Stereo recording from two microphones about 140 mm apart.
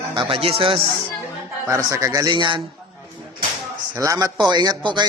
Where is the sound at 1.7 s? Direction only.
20° right (ahead or behind).